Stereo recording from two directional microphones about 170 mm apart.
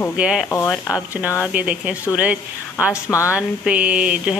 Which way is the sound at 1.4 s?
5° right (ahead or behind).